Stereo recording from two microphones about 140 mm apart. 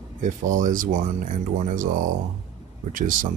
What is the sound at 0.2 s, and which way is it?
Speech, 70° right (ahead or behind).